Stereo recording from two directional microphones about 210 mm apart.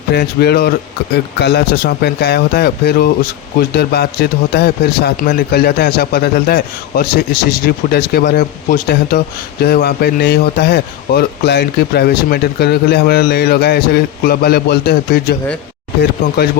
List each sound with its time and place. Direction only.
0.1 s a man's voice: 50° left (ahead or behind)